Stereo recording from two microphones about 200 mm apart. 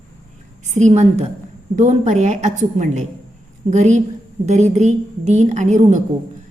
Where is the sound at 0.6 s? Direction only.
35° right (ahead or behind).